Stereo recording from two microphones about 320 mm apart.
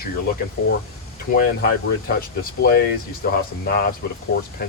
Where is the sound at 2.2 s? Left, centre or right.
Left.